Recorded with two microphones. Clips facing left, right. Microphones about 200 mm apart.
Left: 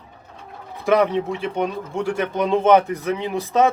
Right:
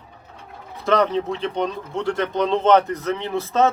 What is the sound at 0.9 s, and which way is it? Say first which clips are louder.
Speech: left 1 dB; 10° left (ahead or behind).